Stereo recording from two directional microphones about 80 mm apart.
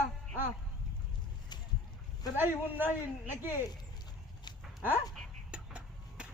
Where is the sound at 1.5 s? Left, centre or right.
Left.